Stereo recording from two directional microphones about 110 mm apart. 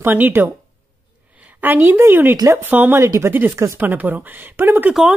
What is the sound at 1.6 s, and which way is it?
Speech, 20° right (ahead or behind).